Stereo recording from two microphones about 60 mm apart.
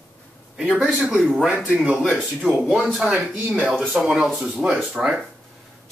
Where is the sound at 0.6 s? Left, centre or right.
Right.